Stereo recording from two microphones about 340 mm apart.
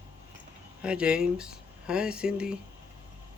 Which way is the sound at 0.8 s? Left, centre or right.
Centre.